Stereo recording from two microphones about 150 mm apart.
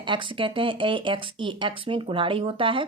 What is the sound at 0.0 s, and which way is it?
Speech, 30° right (ahead or behind).